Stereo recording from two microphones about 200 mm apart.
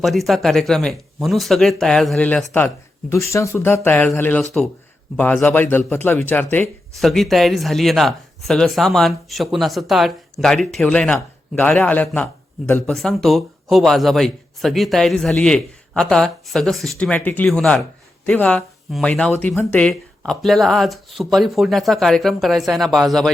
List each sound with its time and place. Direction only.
0.0 s a man's voice: centre (ahead or behind)